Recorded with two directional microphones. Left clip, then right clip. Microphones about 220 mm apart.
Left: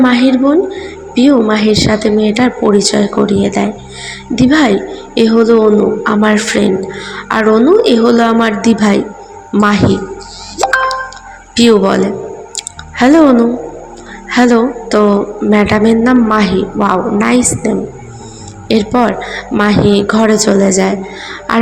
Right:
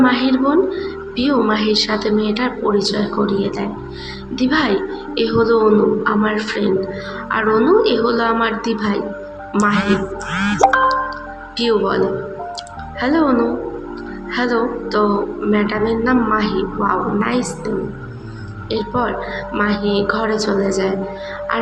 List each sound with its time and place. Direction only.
0.0 s speech: 40° left (ahead or behind)
9.5 s speech: 35° left (ahead or behind)
11.5 s a woman's voice: 45° left (ahead or behind)
12.5 s music: 45° left (ahead or behind)
14.3 s a woman's voice: 45° left (ahead or behind)
18.7 s a woman's voice: 45° left (ahead or behind)